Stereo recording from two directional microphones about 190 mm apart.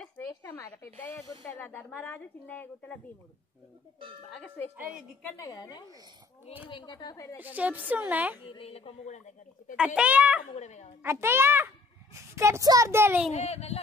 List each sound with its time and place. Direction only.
0.3 s speech: 15° left (ahead or behind)
5.4 s speech: 20° left (ahead or behind)
7.3 s a child's voice: 10° right (ahead or behind)
8.5 s a woman's voice: 30° left (ahead or behind)
9.8 s a child's voice: 5° right (ahead or behind)
10.5 s a woman's voice: 35° left (ahead or behind)
11.0 s a child's voice: 15° right (ahead or behind)
13.3 s a woman's voice: 35° left (ahead or behind)